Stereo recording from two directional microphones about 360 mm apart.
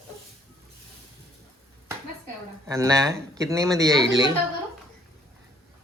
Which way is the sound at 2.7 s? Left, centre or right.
Centre.